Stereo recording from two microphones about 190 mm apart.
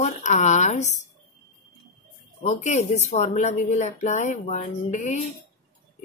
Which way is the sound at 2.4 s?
40° left (ahead or behind).